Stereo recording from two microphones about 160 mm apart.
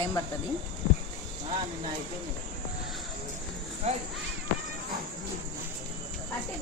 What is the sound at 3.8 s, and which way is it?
Speech, 45° right (ahead or behind).